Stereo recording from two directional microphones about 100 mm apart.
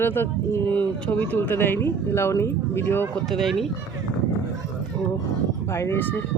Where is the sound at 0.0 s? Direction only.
25° left (ahead or behind).